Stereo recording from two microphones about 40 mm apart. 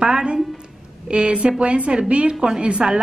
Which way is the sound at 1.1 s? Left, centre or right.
Right.